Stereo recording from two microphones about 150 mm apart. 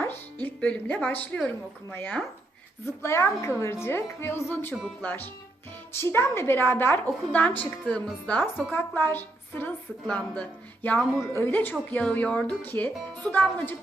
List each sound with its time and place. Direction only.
0.4 s a woman's voice: 10° left (ahead or behind)